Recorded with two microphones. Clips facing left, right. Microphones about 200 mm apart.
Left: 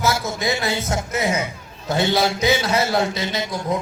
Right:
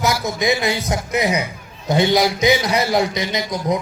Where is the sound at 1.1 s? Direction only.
15° right (ahead or behind).